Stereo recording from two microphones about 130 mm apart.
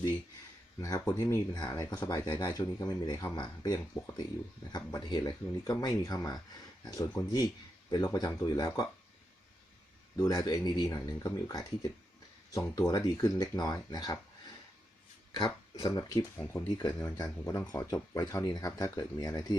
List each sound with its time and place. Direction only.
0.8 s speech: 25° left (ahead or behind)
10.2 s speech: 25° left (ahead or behind)
15.4 s speech: 35° left (ahead or behind)